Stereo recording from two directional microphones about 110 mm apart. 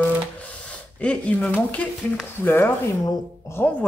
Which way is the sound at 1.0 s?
10° left (ahead or behind).